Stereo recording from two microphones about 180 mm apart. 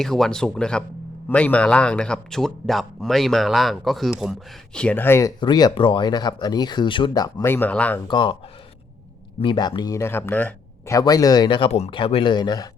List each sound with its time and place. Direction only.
0.0 s speech: centre (ahead or behind)
5.4 s speech: 25° left (ahead or behind); by 8.0 s 10° left (ahead or behind)
8.0 s speech: 25° left (ahead or behind)
9.4 s speech: 25° left (ahead or behind)